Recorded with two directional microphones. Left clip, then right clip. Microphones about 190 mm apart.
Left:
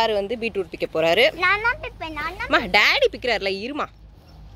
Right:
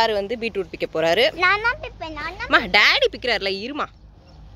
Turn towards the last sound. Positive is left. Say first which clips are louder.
# even
turn(degrees=5)  # may be behind; listen again after turning